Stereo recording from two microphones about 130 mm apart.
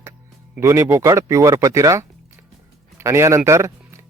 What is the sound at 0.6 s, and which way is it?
Speech, 25° right (ahead or behind).